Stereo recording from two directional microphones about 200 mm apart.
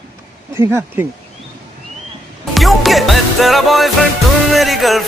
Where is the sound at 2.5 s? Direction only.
Centre (ahead or behind).